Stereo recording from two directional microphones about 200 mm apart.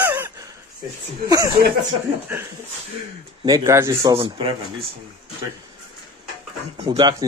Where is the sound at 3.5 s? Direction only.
15° right (ahead or behind).